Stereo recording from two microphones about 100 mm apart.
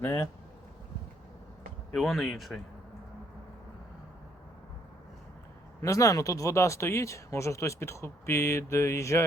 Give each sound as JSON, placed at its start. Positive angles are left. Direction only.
{"t": 1.9, "sound": "speech", "side_deg": 0}
{"t": 5.8, "sound": "speech", "side_deg": 35}